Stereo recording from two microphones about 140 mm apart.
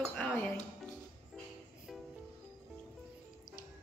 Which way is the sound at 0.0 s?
10° left (ahead or behind).